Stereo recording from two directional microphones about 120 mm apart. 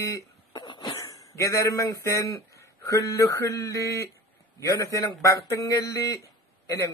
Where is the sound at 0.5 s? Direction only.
40° left (ahead or behind).